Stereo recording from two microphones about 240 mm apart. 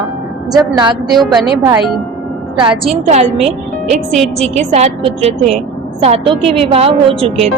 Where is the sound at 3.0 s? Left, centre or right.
Right.